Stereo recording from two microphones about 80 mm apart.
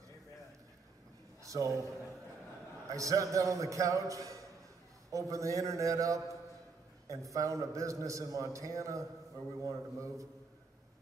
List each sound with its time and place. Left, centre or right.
1.4 s a man's voice: right
2.9 s a man's voice: right